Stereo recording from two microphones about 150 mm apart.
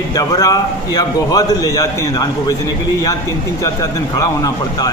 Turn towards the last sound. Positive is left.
turn(degrees=25)  # may be behind; listen again after turning